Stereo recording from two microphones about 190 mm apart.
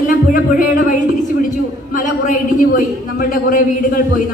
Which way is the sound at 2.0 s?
45° left (ahead or behind).